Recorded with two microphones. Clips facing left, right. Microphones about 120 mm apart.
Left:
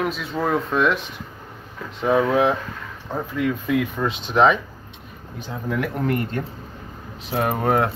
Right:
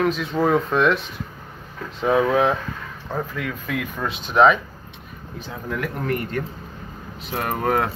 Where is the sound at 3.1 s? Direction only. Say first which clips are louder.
Left 4 dB; 20° left (ahead or behind).